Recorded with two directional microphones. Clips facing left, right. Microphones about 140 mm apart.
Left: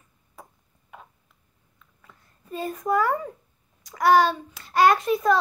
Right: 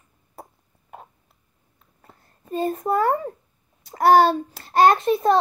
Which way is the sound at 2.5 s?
30° right (ahead or behind).